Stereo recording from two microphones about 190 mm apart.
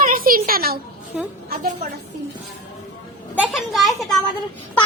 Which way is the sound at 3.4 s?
Centre (ahead or behind).